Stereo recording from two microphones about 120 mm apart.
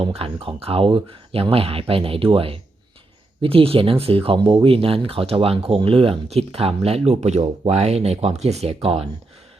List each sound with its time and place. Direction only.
0.0 s speech: 50° right (ahead or behind)